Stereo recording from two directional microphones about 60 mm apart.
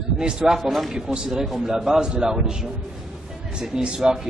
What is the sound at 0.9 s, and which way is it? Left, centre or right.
A man's voice, centre.